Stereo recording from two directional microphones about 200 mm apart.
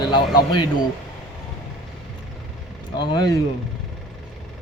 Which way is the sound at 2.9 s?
20° left (ahead or behind).